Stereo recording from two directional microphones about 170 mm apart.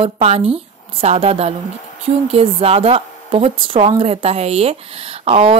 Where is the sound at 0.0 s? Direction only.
35° right (ahead or behind).